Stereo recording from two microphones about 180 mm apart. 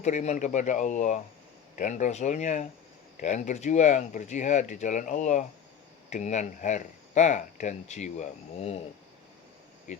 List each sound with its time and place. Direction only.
0.0 s speech: 40° left (ahead or behind)